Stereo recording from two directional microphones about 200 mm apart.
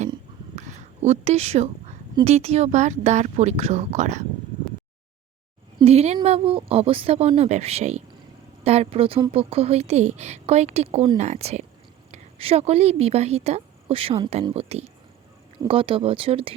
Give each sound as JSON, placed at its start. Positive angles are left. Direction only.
{"t": 0.5, "sound": "a sound", "side_deg": -35}
{"t": 2.1, "sound": "a woman's voice", "side_deg": -30}
{"t": 5.8, "sound": "a woman's voice", "side_deg": -30}